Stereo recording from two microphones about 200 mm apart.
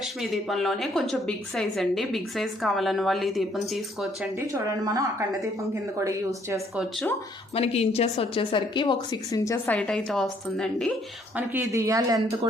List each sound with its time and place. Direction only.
0.0 s a woman's voice: centre (ahead or behind)
4.4 s speech: 15° right (ahead or behind)
7.5 s a woman's voice: 30° left (ahead or behind); by 10.9 s centre (ahead or behind)
11.3 s speech: 10° right (ahead or behind)